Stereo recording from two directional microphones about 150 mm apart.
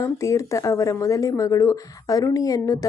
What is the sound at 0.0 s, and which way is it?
Speech, 20° left (ahead or behind).